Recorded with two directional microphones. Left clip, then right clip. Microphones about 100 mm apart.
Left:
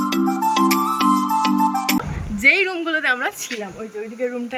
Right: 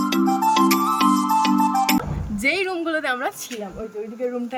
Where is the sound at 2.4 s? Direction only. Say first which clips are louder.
Left 6 dB; 20° right (ahead or behind).